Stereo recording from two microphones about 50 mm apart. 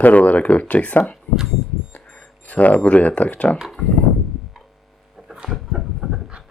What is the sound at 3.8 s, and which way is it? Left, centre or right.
Speech, centre.